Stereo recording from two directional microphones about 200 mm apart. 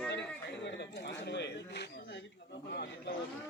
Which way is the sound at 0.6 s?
60° left (ahead or behind).